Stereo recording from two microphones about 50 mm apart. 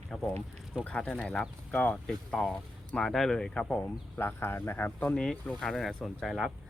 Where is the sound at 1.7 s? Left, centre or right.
Left.